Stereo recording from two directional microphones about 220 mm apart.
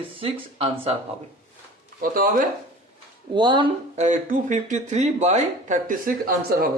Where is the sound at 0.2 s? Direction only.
25° right (ahead or behind).